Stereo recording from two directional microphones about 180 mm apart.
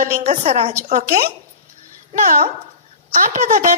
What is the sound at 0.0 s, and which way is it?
A woman's voice, 45° right (ahead or behind).